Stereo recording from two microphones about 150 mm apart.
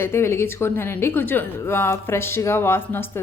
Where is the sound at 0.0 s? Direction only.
15° left (ahead or behind).